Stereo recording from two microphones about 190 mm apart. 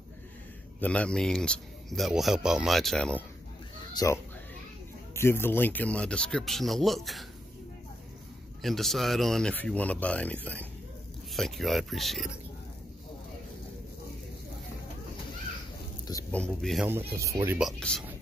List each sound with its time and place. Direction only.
0.7 s speech: 5° left (ahead or behind)
3.9 s speech: 15° left (ahead or behind); by 7.2 s centre (ahead or behind)
8.6 s speech: centre (ahead or behind)
16.3 s speech: 5° left (ahead or behind)
16.8 s speech: 15° right (ahead or behind)
17.6 s speech: centre (ahead or behind)